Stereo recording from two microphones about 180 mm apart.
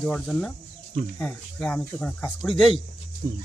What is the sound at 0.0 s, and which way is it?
Speech, 5° left (ahead or behind).